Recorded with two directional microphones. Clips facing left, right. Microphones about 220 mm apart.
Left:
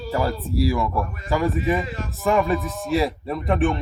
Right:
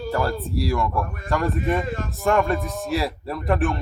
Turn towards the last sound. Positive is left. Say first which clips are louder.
# left 2 dB
turn(degrees=0)  # may be behind; listen again after turning